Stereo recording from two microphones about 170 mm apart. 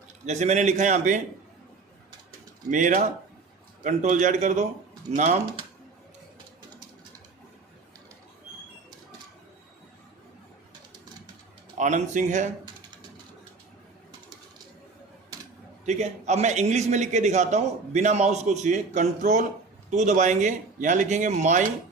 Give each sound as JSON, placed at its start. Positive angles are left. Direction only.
{"t": 0.3, "sound": "a man's voice", "side_deg": -45}
{"t": 2.6, "sound": "a man's voice", "side_deg": -50}
{"t": 11.8, "sound": "a man's voice", "side_deg": -45}
{"t": 15.9, "sound": "a man's voice", "side_deg": -40}